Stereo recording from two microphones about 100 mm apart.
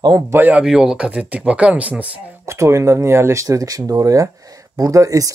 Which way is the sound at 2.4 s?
30° right (ahead or behind).